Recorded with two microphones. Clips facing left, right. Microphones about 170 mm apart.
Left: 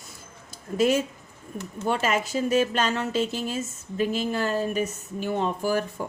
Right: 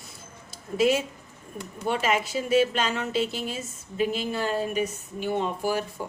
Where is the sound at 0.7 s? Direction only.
45° left (ahead or behind).